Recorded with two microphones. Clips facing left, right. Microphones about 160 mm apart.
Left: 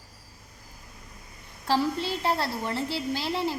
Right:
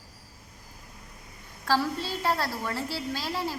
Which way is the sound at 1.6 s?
25° left (ahead or behind).